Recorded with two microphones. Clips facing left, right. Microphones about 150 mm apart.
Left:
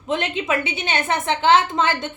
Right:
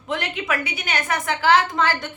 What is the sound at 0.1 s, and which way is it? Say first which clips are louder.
A woman's voice: left 3 dB; 25° left (ahead or behind).